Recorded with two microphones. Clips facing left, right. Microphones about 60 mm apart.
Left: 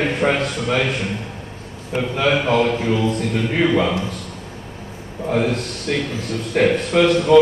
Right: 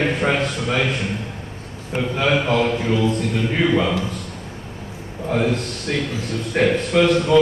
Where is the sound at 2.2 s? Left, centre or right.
Left.